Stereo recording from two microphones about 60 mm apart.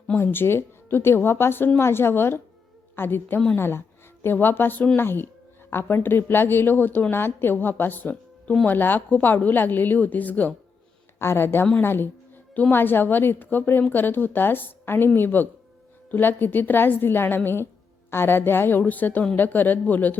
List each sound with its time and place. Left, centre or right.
0.2 s a woman's voice: left
11.2 s speech: left